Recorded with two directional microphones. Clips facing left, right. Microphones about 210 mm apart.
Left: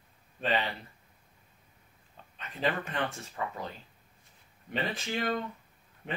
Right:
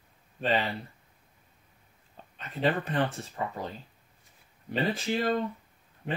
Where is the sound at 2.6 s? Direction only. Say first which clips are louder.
Right 4 dB; 35° right (ahead or behind).